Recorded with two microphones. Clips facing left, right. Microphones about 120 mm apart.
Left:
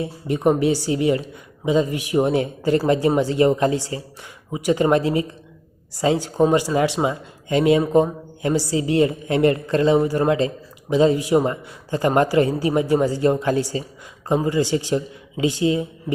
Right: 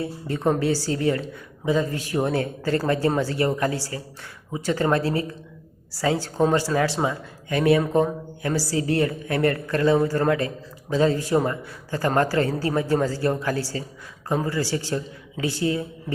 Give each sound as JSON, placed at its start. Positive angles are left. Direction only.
{"t": 0.0, "sound": "speech", "side_deg": 15}